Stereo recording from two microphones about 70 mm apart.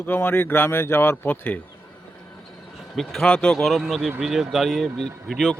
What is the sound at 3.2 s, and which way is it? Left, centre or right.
A man's voice, centre.